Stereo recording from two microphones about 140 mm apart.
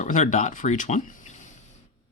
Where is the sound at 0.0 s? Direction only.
60° left (ahead or behind).